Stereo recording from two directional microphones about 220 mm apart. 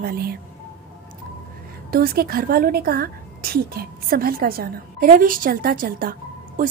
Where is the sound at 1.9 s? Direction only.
40° right (ahead or behind).